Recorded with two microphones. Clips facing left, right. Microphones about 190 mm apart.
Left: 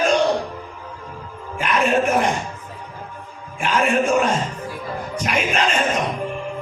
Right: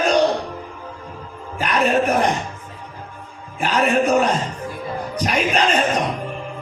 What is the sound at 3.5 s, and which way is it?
Speech, 35° right (ahead or behind).